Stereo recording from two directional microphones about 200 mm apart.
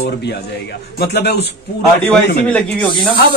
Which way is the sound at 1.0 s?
55° left (ahead or behind).